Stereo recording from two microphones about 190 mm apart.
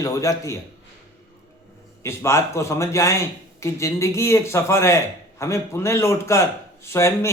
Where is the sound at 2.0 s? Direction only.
15° left (ahead or behind).